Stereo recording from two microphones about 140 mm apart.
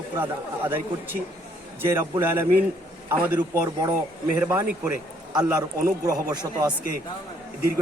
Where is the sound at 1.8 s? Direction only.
15° right (ahead or behind).